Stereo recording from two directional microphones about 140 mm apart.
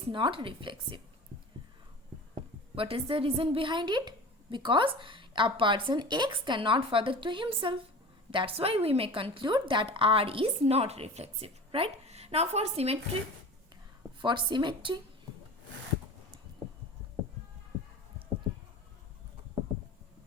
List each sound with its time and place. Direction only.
0.1 s a woman's voice: 35° right (ahead or behind)
2.3 s a woman's voice: 40° right (ahead or behind)
14.2 s a woman's voice: 35° right (ahead or behind)